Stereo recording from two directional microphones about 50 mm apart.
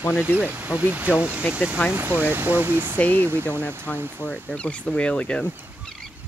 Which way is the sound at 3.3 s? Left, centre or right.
Right.